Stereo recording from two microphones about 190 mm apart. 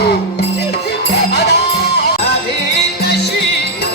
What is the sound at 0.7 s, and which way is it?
Music, 60° left (ahead or behind).